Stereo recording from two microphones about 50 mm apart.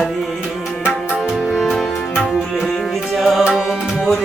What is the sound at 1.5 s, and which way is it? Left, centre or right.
Music, centre.